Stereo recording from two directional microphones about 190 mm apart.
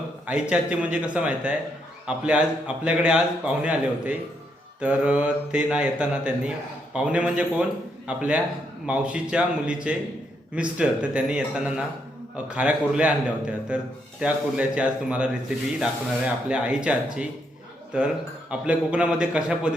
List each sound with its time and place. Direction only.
0.3 s a man's voice: 5° right (ahead or behind)